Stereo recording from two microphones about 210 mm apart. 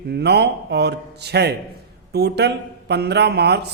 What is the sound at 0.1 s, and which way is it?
A man's voice, 50° right (ahead or behind).